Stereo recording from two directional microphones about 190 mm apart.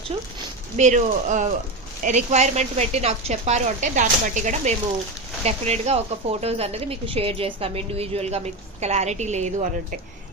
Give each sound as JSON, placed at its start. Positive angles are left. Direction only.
{"t": 0.8, "sound": "speech", "side_deg": -40}